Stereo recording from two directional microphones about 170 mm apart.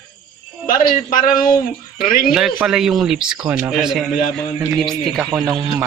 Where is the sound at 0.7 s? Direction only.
55° left (ahead or behind).